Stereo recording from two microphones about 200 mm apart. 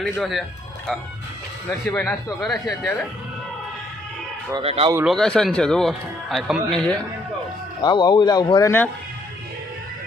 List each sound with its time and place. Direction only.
0.0 s speech: centre (ahead or behind)
1.8 s speech: 5° left (ahead or behind)
4.5 s speech: 30° right (ahead or behind)
5.0 s speech: centre (ahead or behind)
7.8 s speech: 20° left (ahead or behind)